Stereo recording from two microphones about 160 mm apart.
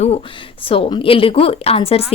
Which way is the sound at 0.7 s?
35° left (ahead or behind).